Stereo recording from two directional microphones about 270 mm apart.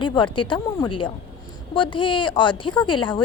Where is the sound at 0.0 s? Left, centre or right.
Centre.